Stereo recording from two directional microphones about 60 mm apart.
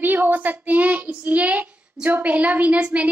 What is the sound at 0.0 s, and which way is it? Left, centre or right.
A woman's voice, right.